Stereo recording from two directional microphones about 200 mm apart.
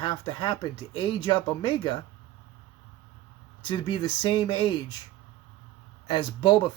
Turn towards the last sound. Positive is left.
turn(degrees=20)  # may be behind; listen again after turning